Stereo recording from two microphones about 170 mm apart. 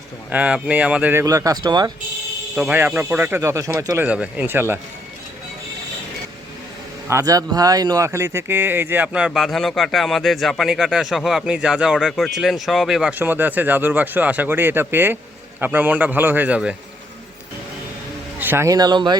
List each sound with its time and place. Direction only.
0.3 s speech: 10° right (ahead or behind); by 1.9 s 25° right (ahead or behind)
2.6 s speech: 10° right (ahead or behind)
7.1 s speech: 20° right (ahead or behind)
18.3 s speech: 15° right (ahead or behind)